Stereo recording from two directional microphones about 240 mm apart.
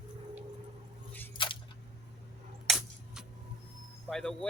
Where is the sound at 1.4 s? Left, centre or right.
Centre.